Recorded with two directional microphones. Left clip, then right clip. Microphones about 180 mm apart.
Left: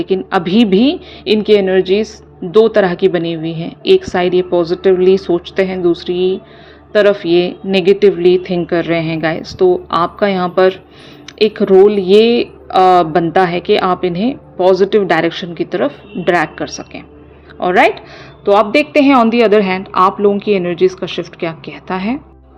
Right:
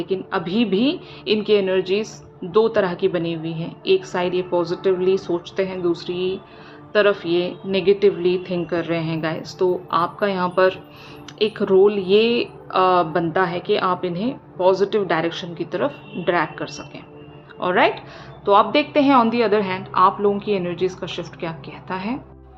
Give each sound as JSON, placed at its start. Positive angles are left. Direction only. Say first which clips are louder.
{"t": 0.0, "sound": "a woman's voice", "louder": "left 9 dB", "side_deg": 40}